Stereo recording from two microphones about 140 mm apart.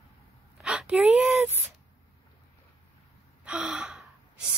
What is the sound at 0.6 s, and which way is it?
Whimper, 5° right (ahead or behind).